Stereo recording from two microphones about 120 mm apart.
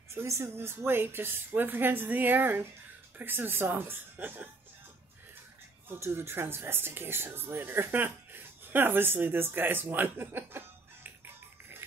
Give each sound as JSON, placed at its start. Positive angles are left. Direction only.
{"t": 0.1, "sound": "a woman's voice", "side_deg": -20}
{"t": 5.9, "sound": "speech", "side_deg": -20}